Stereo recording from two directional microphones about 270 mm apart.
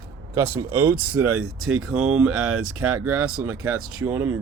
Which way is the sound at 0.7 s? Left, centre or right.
Centre.